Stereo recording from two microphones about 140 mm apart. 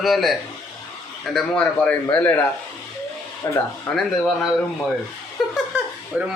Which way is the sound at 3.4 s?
20° left (ahead or behind).